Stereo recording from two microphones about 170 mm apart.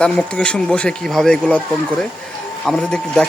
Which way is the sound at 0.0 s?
5° left (ahead or behind).